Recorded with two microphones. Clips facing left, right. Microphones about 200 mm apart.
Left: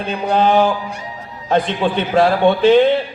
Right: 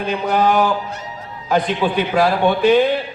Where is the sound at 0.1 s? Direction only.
30° left (ahead or behind).